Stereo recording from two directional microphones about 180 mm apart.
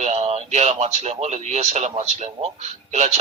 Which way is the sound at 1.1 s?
35° right (ahead or behind).